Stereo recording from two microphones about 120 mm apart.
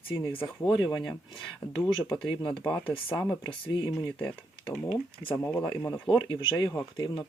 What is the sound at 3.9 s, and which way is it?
Speech, 5° left (ahead or behind).